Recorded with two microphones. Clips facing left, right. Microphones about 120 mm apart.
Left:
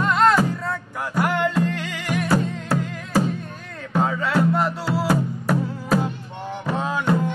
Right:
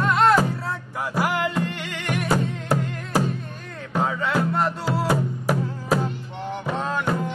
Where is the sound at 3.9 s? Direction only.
Centre (ahead or behind).